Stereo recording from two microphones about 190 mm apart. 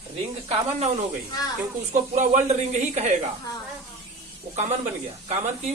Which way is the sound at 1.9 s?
40° right (ahead or behind).